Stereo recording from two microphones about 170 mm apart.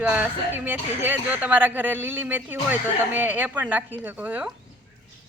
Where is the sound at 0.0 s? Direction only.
10° right (ahead or behind).